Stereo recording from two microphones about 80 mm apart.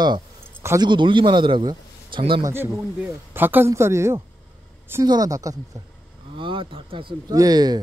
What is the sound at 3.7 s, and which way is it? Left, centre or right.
Speech, right.